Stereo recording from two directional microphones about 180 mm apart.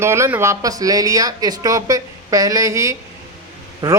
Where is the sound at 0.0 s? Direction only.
15° right (ahead or behind).